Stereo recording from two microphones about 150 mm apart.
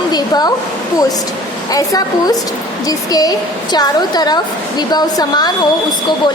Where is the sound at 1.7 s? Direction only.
25° left (ahead or behind).